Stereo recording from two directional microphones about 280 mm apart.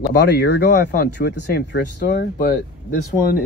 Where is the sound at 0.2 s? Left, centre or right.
Left.